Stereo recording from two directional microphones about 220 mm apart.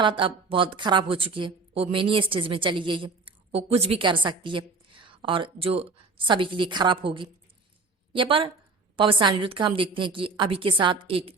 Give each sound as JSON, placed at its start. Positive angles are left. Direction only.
{"t": 0.0, "sound": "a woman's voice", "side_deg": -20}